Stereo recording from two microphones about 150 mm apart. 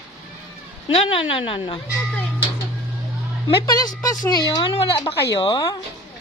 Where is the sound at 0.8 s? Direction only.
40° left (ahead or behind).